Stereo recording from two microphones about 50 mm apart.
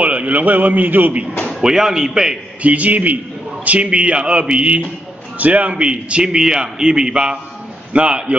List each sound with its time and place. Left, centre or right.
0.0 s a man's voice: right
1.6 s speech: centre
2.6 s a man's voice: right